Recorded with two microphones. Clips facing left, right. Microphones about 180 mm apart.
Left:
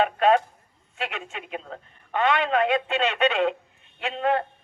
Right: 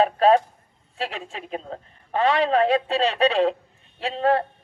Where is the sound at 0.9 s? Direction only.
35° right (ahead or behind).